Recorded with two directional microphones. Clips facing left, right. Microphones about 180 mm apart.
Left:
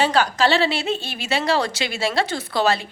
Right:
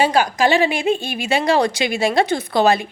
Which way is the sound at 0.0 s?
10° right (ahead or behind).